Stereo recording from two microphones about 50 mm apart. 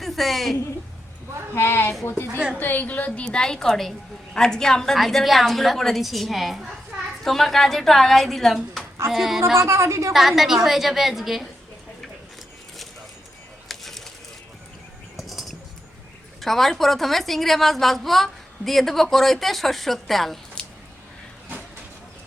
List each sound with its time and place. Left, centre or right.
0.0 s a woman's voice: centre
1.5 s speech: left
2.6 s a woman's voice: left
3.2 s a woman's voice: centre
9.6 s a woman's voice: right
10.1 s a woman's voice: centre
13.7 s a sound: centre
15.3 s bird: centre
16.4 s a woman's voice: centre